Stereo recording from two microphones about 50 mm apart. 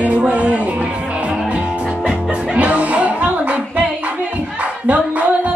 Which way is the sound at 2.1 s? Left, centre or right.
Right.